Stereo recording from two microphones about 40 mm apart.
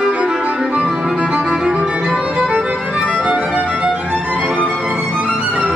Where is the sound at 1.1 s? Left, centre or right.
Right.